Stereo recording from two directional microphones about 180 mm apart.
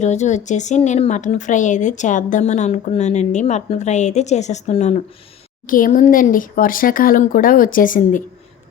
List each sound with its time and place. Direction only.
0.0 s speech: 40° left (ahead or behind)
5.6 s speech: 50° left (ahead or behind)